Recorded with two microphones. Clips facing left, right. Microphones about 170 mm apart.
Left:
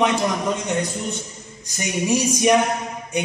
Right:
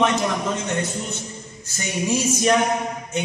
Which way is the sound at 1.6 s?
15° left (ahead or behind).